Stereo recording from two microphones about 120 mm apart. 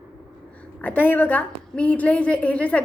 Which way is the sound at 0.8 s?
15° left (ahead or behind).